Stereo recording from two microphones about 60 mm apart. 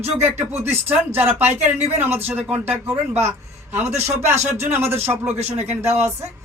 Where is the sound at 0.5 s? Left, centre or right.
Right.